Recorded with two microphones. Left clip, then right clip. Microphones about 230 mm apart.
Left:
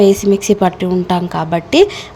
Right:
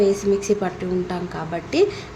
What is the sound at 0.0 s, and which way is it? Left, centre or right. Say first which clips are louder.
A woman's voice: left 8 dB; left.